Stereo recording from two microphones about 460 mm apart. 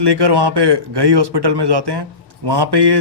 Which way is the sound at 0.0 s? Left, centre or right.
Right.